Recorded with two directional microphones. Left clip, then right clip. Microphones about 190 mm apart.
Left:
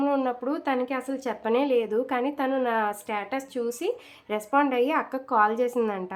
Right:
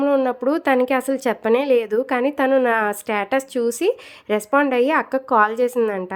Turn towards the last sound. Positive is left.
turn(degrees=-25)  # may be behind; listen again after turning